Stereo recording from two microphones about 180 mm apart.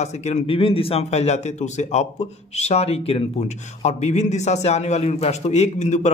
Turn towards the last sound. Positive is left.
turn(degrees=40)  # may be behind; listen again after turning